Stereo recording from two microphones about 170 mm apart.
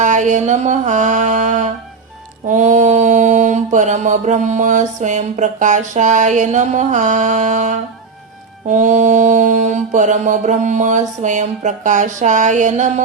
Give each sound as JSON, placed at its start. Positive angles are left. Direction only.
{"t": 0.0, "sound": "mantra", "side_deg": -45}